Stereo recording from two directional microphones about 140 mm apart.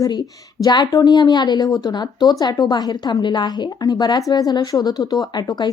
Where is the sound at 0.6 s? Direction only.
30° left (ahead or behind).